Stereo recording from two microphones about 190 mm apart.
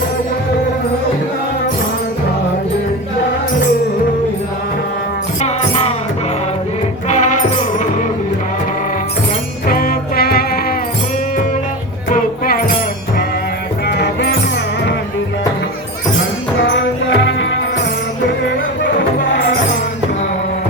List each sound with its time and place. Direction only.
7.1 s music: 40° left (ahead or behind)
9.6 s music: 50° left (ahead or behind)
12.1 s music: 50° left (ahead or behind)
13.8 s music: 60° left (ahead or behind)
16.6 s music: 70° left (ahead or behind)
18.8 s music: 70° left (ahead or behind)